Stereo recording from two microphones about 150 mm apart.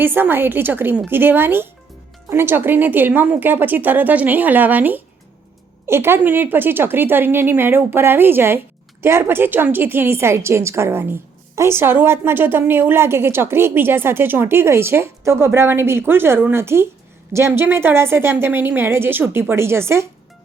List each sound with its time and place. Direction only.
0.0 s a woman's voice: 15° right (ahead or behind)